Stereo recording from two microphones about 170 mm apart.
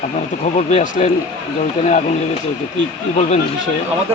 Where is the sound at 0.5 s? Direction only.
45° left (ahead or behind).